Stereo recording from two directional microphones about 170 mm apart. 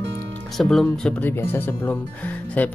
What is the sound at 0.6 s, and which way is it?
Speech, centre (ahead or behind).